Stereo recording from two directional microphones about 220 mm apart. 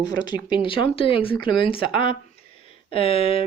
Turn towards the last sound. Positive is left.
turn(degrees=25)  # may be behind; listen again after turning